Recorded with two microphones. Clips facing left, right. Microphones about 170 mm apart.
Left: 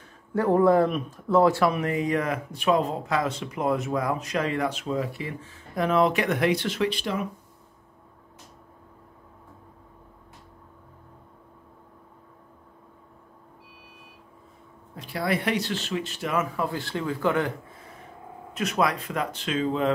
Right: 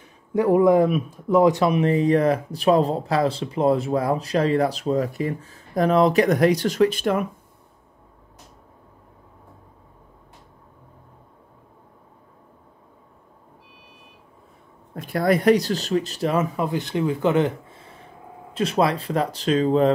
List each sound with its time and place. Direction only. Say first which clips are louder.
0.3 s speech: right 3 dB; 10° right (ahead or behind); by 7.2 s 50° right (ahead or behind)
15.0 s speech: right 7 dB; 50° right (ahead or behind); by 16.4 s 35° right (ahead or behind)
16.5 s speech: right 5 dB; 20° right (ahead or behind); by 19.9 s 35° right (ahead or behind)